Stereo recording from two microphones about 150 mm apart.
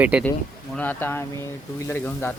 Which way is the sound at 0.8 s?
15° left (ahead or behind).